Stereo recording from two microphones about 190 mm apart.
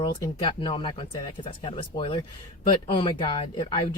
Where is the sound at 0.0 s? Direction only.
25° left (ahead or behind).